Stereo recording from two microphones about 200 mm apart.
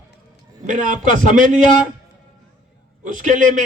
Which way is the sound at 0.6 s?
40° right (ahead or behind).